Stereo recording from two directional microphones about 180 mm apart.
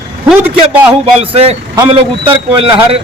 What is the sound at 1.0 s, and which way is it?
Speech, 30° right (ahead or behind).